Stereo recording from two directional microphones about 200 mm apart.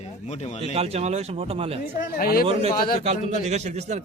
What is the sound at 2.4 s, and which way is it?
A man's voice, 30° right (ahead or behind).